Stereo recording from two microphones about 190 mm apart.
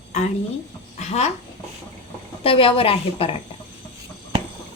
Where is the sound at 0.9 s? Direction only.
35° left (ahead or behind).